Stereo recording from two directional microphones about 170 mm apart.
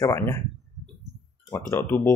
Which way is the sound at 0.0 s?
20° left (ahead or behind).